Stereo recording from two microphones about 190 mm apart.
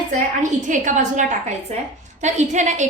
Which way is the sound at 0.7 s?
40° right (ahead or behind).